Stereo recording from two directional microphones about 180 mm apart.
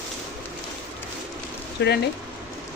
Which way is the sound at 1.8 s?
70° left (ahead or behind).